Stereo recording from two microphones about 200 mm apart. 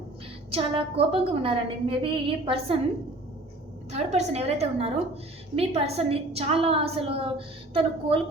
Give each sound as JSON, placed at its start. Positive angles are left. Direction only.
{"t": 0.5, "sound": "a woman's voice", "side_deg": -30}
{"t": 3.9, "sound": "a woman's voice", "side_deg": -35}